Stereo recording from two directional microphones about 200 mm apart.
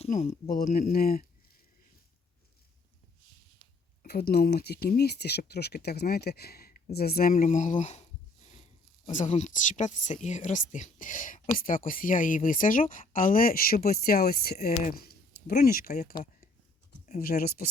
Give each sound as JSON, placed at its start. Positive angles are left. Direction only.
{"t": 0.0, "sound": "speech", "side_deg": 35}
{"t": 4.0, "sound": "speech", "side_deg": 50}
{"t": 9.0, "sound": "speech", "side_deg": 35}
{"t": 15.9, "sound": "speech", "side_deg": 35}
{"t": 17.2, "sound": "speech", "side_deg": 50}